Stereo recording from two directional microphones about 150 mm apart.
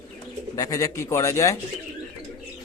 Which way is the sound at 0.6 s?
25° left (ahead or behind).